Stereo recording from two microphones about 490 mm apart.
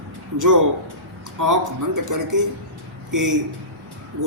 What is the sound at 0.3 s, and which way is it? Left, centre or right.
Speech, right.